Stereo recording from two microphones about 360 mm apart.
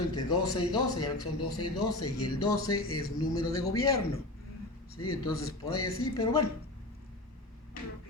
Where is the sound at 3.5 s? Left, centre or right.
Centre.